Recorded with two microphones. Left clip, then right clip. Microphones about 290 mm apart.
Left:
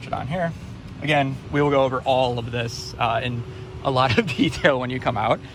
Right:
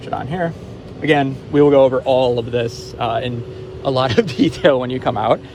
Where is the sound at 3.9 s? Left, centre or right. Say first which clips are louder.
Right 4 dB; centre.